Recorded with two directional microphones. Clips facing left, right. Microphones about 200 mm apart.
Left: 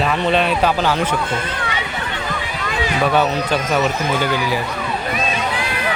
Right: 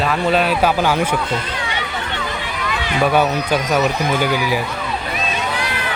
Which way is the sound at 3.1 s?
15° right (ahead or behind).